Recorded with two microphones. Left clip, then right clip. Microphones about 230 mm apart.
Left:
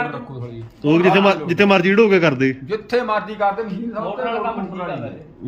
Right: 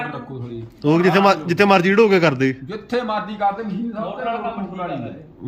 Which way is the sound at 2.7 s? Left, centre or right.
Centre.